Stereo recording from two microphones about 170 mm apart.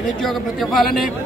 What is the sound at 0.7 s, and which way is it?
Speech, centre (ahead or behind).